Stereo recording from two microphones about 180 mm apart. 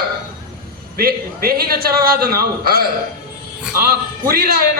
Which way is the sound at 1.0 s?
55° right (ahead or behind).